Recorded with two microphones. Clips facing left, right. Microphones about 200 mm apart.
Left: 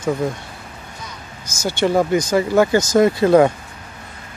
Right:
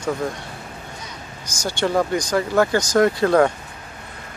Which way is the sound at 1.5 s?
5° left (ahead or behind).